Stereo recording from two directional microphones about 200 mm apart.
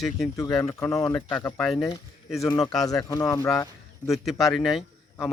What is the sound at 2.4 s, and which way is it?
Speech, 15° left (ahead or behind).